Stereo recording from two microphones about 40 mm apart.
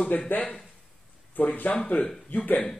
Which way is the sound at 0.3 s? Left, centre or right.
Left.